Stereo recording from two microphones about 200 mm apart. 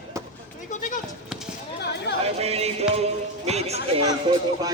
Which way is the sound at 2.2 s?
30° right (ahead or behind).